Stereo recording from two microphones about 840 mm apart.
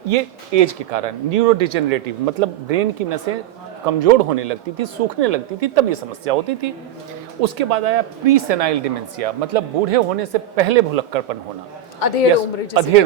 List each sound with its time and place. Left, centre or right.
0.1 s speech: right
11.9 s a man's voice: left
12.7 s speech: right